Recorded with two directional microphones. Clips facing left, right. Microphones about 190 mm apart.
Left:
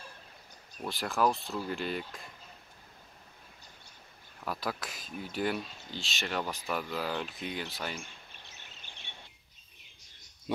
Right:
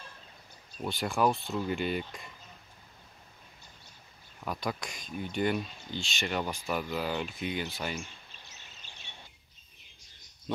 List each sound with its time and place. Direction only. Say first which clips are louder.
0.7 s speech: right 1 dB; centre (ahead or behind)
4.5 s speech: right 1 dB; 5° left (ahead or behind)